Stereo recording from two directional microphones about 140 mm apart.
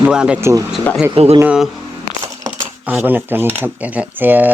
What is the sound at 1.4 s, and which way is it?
Speech, 10° right (ahead or behind).